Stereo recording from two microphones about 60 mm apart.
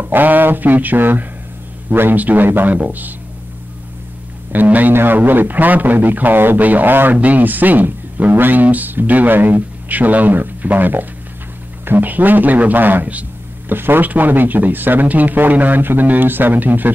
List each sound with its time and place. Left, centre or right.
0.0 s speech: right
4.5 s speech: right